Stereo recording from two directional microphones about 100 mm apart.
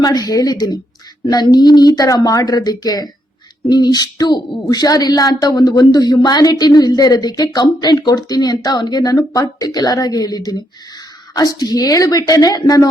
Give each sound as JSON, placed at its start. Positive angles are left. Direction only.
{"t": 0.0, "sound": "speech", "side_deg": 40}